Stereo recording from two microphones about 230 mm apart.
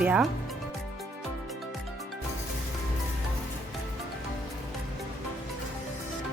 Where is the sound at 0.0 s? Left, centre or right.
Centre.